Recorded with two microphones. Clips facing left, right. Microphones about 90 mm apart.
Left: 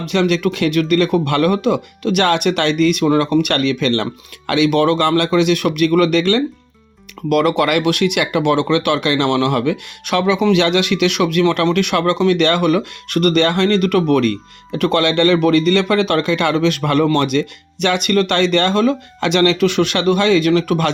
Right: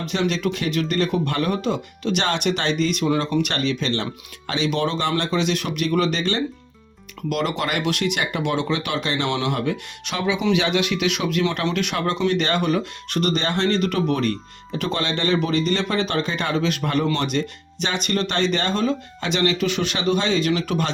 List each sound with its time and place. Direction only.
0.0 s speech: 70° left (ahead or behind)